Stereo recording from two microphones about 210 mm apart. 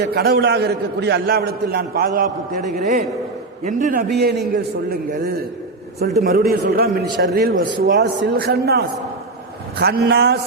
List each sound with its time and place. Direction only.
0.0 s a man's voice: 50° right (ahead or behind)